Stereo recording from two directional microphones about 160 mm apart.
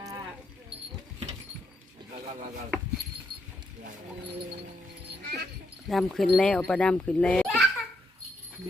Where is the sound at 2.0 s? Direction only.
30° right (ahead or behind).